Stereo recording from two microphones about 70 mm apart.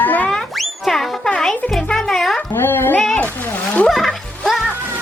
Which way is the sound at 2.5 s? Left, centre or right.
Left.